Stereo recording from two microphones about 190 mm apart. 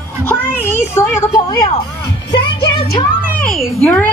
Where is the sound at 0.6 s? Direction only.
15° left (ahead or behind).